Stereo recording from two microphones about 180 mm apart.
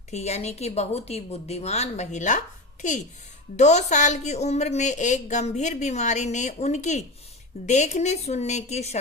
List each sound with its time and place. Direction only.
0.1 s a woman's voice: 40° left (ahead or behind)
3.6 s a woman's voice: 40° left (ahead or behind)